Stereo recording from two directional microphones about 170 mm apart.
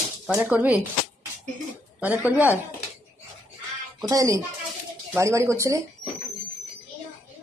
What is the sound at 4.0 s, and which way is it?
Speech, 20° right (ahead or behind).